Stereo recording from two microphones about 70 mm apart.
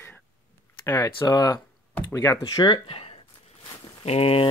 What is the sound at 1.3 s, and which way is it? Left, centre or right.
Speech, left.